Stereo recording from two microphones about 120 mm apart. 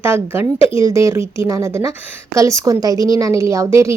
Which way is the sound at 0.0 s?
20° right (ahead or behind).